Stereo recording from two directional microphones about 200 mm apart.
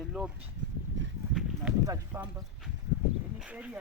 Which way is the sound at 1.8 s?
15° right (ahead or behind).